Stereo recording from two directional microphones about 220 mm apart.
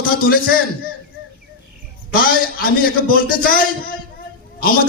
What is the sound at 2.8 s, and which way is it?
A man's voice, 40° left (ahead or behind).